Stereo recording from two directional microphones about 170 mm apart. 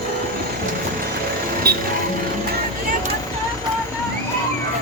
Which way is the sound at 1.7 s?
65° right (ahead or behind).